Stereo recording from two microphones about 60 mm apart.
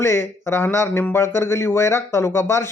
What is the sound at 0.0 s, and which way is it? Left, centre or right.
Speech, left.